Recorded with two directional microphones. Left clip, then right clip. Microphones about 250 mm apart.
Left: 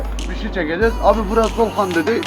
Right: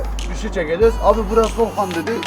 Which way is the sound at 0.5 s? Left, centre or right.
Right.